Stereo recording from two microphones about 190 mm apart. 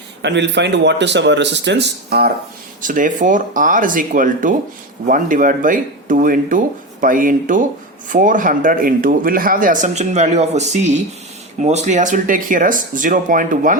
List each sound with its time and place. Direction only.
0.2 s speech: 70° right (ahead or behind)
2.8 s a man's voice: 45° right (ahead or behind)